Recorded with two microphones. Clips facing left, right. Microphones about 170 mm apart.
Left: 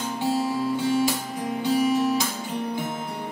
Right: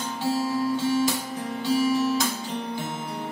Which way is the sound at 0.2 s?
15° left (ahead or behind).